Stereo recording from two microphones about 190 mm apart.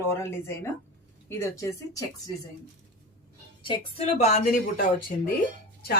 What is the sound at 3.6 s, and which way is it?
A woman's voice, 30° left (ahead or behind).